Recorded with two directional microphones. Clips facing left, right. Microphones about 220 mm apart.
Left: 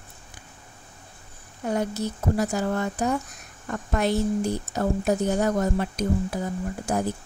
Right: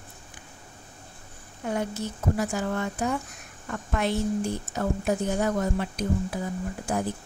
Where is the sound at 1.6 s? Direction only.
40° left (ahead or behind).